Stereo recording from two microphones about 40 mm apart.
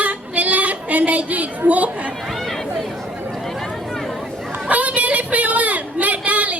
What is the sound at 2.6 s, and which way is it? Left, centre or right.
Chatter, centre.